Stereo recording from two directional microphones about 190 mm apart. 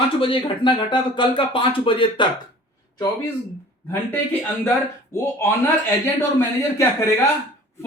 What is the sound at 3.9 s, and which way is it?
Speech, 10° left (ahead or behind).